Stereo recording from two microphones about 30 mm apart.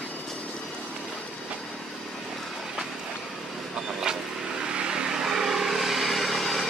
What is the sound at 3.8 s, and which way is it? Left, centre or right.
Vehicle, centre.